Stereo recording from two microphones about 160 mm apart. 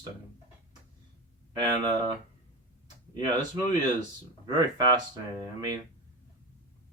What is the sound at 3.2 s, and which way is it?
Speech, 25° right (ahead or behind).